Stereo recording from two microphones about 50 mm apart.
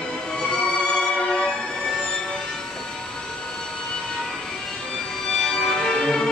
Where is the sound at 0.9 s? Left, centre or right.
Centre.